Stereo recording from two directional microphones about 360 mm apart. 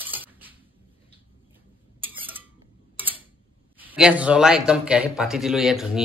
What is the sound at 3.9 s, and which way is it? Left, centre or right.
Speech, centre.